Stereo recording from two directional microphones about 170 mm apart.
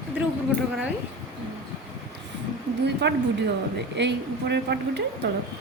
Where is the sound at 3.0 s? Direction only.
90° right.